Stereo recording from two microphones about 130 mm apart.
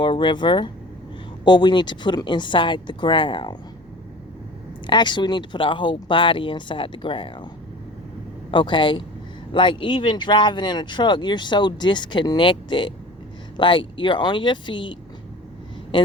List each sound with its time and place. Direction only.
0.0 s speech: 40° left (ahead or behind)
4.9 s speech: 35° left (ahead or behind)
8.4 s a man's voice: 40° left (ahead or behind)